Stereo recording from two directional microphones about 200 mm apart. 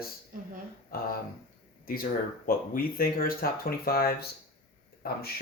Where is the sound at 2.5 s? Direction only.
45° left (ahead or behind).